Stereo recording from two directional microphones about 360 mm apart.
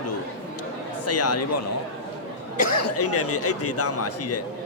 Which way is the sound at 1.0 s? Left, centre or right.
Left.